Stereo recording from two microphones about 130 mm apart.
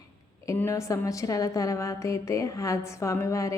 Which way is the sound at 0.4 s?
20° left (ahead or behind).